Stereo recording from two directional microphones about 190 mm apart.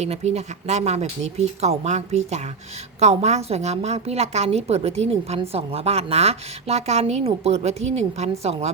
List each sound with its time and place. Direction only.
0.0 s a woman's voice: 35° right (ahead or behind)